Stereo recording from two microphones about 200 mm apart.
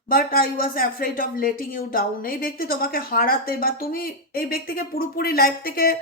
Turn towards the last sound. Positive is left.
turn(degrees=45)  # may be behind; listen again after turning